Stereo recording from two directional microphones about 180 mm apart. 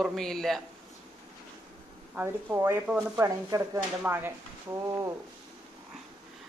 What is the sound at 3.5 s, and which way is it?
Speech, 20° right (ahead or behind).